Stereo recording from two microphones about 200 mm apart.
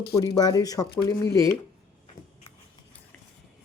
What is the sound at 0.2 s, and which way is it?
Speech, 20° left (ahead or behind).